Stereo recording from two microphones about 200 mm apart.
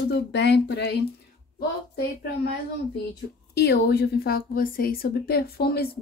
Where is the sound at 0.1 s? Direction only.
60° left (ahead or behind).